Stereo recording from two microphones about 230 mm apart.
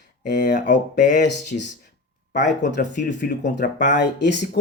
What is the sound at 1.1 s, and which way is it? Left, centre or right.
Speech, left.